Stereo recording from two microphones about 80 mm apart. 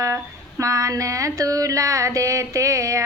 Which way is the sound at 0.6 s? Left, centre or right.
Right.